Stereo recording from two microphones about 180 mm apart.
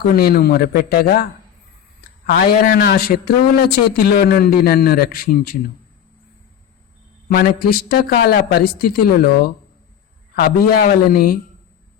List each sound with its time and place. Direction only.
0.0 s a man's voice: 60° left (ahead or behind)
7.3 s a man's voice: 55° left (ahead or behind)